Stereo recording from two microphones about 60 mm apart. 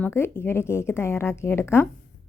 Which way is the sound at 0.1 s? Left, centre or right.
Left.